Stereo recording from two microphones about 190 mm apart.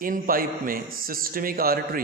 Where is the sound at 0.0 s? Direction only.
50° right (ahead or behind).